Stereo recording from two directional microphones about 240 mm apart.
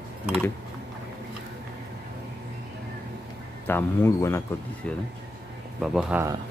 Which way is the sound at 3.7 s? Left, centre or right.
Centre.